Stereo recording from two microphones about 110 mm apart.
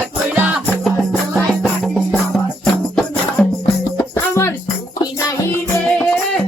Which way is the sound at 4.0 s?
25° left (ahead or behind).